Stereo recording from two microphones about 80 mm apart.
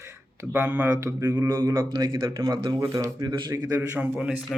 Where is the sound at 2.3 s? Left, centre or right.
Right.